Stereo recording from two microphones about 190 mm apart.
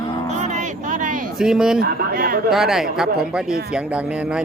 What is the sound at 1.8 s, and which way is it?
Speech, 50° right (ahead or behind).